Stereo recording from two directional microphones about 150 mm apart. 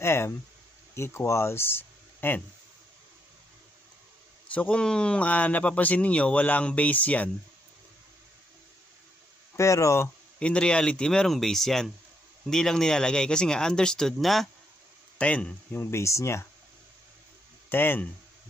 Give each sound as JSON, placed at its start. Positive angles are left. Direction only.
{"t": 0.0, "sound": "a man's voice", "side_deg": 15}
{"t": 4.5, "sound": "a man's voice", "side_deg": 10}
{"t": 9.6, "sound": "a man's voice", "side_deg": 20}
{"t": 17.6, "sound": "speech", "side_deg": 15}